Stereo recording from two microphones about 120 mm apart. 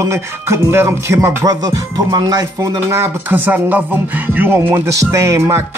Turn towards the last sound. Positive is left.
turn(degrees=-25)  # may be behind; listen again after turning